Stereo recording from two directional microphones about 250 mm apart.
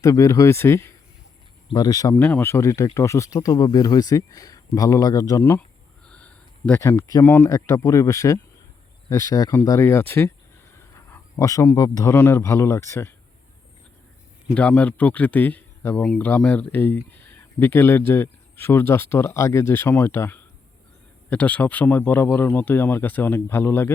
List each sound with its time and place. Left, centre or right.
0.0 s a man's voice: centre
14.5 s speech: centre